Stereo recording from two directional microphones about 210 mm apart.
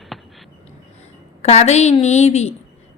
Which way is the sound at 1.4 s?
30° left (ahead or behind).